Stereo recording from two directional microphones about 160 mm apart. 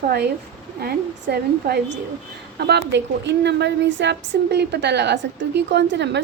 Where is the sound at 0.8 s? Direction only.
80° right.